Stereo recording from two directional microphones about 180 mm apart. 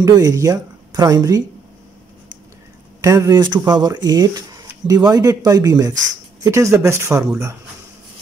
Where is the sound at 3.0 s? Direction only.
20° right (ahead or behind).